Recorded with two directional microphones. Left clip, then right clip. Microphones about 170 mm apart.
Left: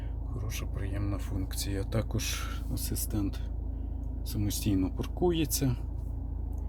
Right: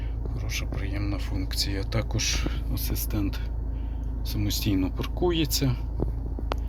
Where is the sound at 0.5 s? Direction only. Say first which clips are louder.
Right 8 dB; 50° left (ahead or behind).